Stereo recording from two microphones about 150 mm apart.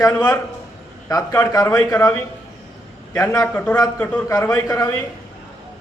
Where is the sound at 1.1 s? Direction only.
20° left (ahead or behind).